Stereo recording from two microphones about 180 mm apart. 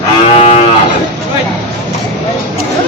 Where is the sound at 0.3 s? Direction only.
35° left (ahead or behind).